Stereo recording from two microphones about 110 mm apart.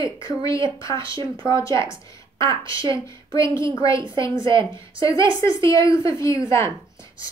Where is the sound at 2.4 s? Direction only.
30° left (ahead or behind).